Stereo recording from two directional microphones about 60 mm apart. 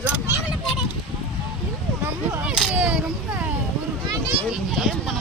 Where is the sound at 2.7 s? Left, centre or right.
Centre.